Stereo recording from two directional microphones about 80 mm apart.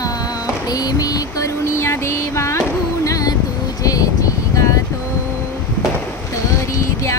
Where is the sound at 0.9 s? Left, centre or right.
Left.